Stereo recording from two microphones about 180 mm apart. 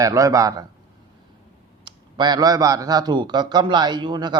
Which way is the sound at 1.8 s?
25° right (ahead or behind).